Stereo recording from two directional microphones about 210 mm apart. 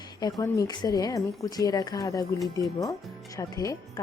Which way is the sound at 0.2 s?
20° left (ahead or behind).